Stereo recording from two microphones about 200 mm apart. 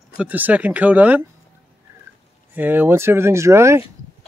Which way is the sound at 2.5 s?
10° right (ahead or behind).